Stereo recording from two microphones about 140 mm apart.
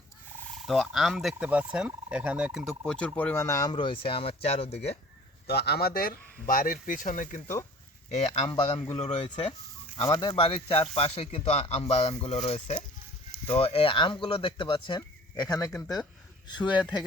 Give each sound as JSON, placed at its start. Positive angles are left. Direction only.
{"t": 0.6, "sound": "speech", "side_deg": 0}
{"t": 5.8, "sound": "speech", "side_deg": 90}
{"t": 8.1, "sound": "speech", "side_deg": 50}